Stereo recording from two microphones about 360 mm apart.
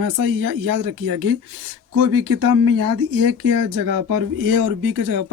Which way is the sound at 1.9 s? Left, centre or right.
Right.